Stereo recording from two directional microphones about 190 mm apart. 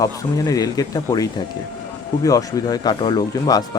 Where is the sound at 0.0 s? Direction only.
20° left (ahead or behind).